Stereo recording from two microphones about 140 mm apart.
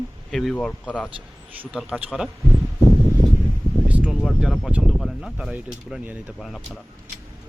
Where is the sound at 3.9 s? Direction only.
10° right (ahead or behind).